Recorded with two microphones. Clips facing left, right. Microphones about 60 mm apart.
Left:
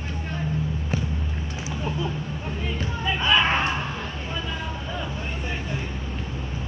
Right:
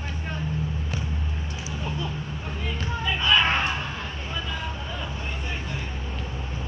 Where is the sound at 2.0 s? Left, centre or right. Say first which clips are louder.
Left 3 dB; centre.